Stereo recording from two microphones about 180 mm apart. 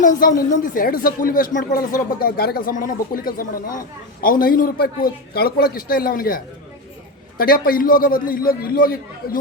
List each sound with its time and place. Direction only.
0.0 s speech: 45° left (ahead or behind)